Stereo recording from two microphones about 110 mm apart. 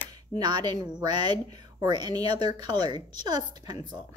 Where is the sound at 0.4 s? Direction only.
40° right (ahead or behind).